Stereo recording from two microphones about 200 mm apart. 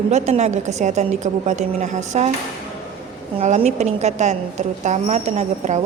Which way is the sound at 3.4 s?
35° right (ahead or behind).